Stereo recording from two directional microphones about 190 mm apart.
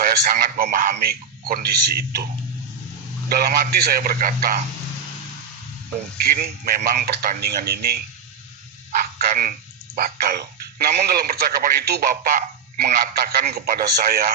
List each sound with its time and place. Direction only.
0.1 s speech: 50° right (ahead or behind)
3.2 s speech: 50° right (ahead or behind)
6.2 s speech: 50° right (ahead or behind)
8.9 s frog: 40° right (ahead or behind)
10.8 s a man's voice: 55° right (ahead or behind)
12.0 s speech: 45° right (ahead or behind)